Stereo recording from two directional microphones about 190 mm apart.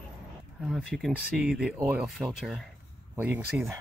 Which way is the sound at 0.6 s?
Centre (ahead or behind).